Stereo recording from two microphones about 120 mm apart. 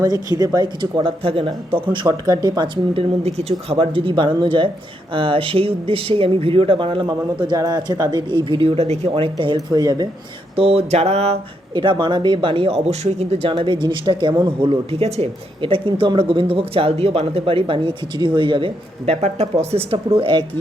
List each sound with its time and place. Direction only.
0.0 s speech: 35° right (ahead or behind)
2.9 s speech: 55° right (ahead or behind); by 8.4 s 35° right (ahead or behind)
8.4 s speech: 50° right (ahead or behind)
9.6 s speech: 35° right (ahead or behind)
10.5 s a sound: 55° right (ahead or behind)
11.7 s speech: 40° right (ahead or behind)
19.2 s speech: 60° right (ahead or behind); by 20.4 s 45° right (ahead or behind)